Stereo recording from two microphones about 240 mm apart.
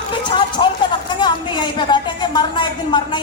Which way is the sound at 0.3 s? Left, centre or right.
Centre.